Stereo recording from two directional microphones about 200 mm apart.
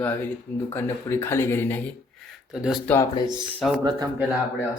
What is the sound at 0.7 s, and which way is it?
Speech, 10° left (ahead or behind).